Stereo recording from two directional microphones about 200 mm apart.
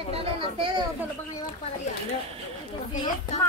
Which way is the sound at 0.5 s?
25° right (ahead or behind).